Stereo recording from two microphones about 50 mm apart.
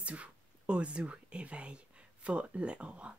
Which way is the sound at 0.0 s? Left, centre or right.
Right.